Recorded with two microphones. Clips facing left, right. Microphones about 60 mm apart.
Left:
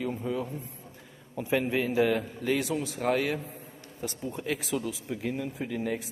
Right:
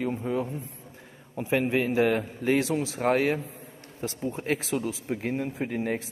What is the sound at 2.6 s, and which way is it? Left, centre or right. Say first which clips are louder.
Speech: right 3 dB; right.